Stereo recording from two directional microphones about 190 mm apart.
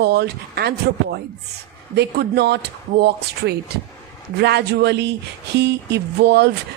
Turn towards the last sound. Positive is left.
turn(degrees=-60)  # may be behind; listen again after turning